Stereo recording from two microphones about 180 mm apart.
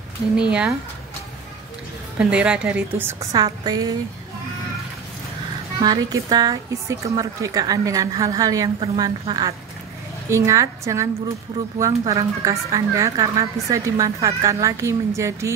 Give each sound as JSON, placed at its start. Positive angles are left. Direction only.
{"t": 0.4, "sound": "speech", "side_deg": -5}
{"t": 2.1, "sound": "a woman's voice", "side_deg": -5}
{"t": 5.8, "sound": "a woman's voice", "side_deg": -20}
{"t": 12.1, "sound": "a woman's voice", "side_deg": -20}